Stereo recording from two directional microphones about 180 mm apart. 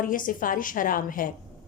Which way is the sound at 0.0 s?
50° left (ahead or behind).